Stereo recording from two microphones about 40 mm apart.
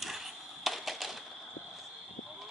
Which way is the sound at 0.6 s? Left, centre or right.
Centre.